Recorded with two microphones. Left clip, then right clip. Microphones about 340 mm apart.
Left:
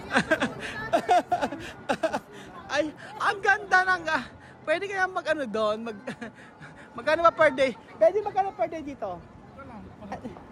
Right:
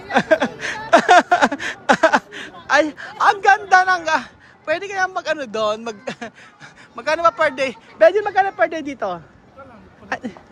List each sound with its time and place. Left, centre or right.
0.1 s chuckle: centre
3.0 s a woman's voice: centre
7.9 s a man's voice: right
10.1 s a sound: right